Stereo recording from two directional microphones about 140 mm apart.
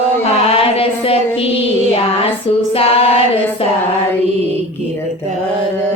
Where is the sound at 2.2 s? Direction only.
45° left (ahead or behind).